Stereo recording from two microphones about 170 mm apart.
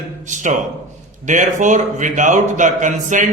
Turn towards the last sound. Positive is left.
turn(degrees=-50)  # may be behind; listen again after turning